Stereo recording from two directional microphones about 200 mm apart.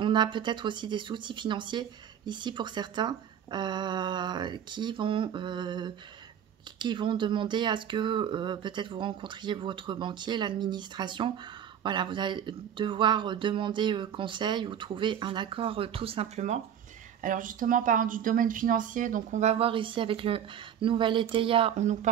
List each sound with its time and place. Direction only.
0.0 s speech: 25° right (ahead or behind)